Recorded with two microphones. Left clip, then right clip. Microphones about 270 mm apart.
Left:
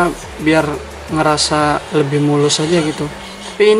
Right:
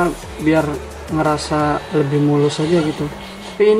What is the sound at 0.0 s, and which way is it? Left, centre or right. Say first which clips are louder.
Speech: left 2 dB; centre.